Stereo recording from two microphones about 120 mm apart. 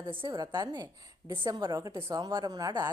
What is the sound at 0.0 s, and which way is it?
Speech, 40° right (ahead or behind).